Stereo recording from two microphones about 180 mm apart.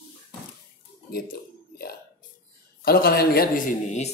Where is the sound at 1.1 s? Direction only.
55° left (ahead or behind).